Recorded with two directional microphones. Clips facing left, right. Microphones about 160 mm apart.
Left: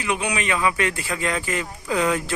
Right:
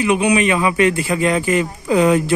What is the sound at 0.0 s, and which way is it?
A man's voice, 15° right (ahead or behind).